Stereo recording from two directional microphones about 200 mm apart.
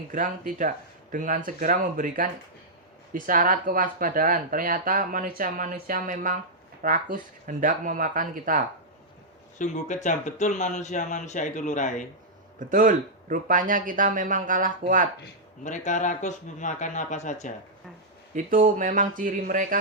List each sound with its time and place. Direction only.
0.1 s speech: 40° right (ahead or behind)
9.6 s speech: 40° left (ahead or behind)
12.5 s speech: 40° right (ahead or behind)
15.6 s speech: 40° left (ahead or behind)
18.3 s speech: 40° right (ahead or behind)